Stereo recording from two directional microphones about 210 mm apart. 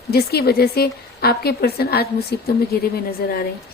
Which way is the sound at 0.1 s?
50° left (ahead or behind).